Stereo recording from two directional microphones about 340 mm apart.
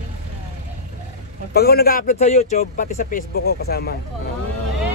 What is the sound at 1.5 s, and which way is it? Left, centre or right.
Speech, left.